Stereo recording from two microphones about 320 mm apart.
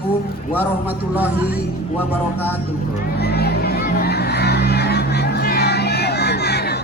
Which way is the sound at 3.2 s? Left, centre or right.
Left.